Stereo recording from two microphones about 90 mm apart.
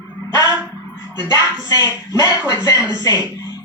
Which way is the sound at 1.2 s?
45° left (ahead or behind).